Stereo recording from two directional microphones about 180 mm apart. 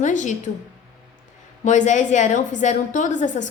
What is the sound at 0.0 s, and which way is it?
Speech, 45° left (ahead or behind).